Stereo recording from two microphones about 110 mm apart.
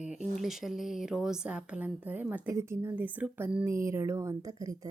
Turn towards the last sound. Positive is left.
turn(degrees=-30)  # may be behind; listen again after turning